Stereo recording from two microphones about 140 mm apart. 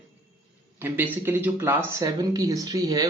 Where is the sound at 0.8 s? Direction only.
15° right (ahead or behind).